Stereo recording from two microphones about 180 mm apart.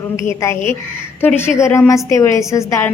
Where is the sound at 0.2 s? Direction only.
15° left (ahead or behind).